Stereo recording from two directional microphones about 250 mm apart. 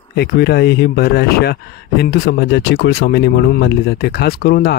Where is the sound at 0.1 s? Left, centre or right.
Left.